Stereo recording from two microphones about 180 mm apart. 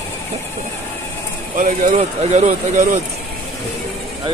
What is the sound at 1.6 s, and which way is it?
Speech, 45° right (ahead or behind).